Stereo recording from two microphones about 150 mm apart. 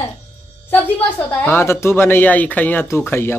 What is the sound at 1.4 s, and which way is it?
Speech, 15° left (ahead or behind).